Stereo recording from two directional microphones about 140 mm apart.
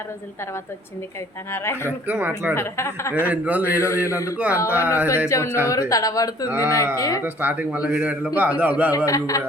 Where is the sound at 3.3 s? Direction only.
10° right (ahead or behind).